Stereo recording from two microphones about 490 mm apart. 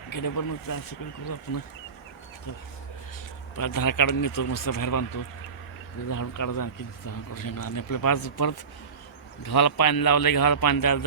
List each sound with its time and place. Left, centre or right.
0.1 s speech: left
3.6 s speech: left
6.1 s a man's voice: left